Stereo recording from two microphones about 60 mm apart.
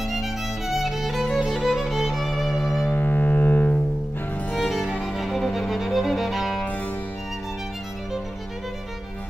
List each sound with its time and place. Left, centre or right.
0.0 s music: centre
2.8 s music: left
4.6 s violin: centre